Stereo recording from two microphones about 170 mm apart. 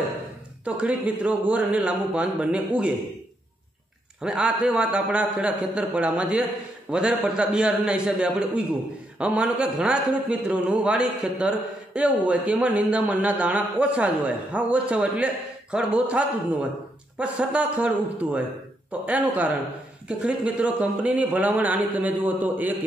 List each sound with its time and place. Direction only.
0.7 s a man's voice: 10° right (ahead or behind)
4.2 s a man's voice: 5° right (ahead or behind)